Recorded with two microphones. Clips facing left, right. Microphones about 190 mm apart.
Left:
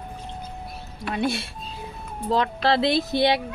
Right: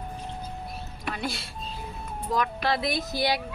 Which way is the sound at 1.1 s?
25° left (ahead or behind).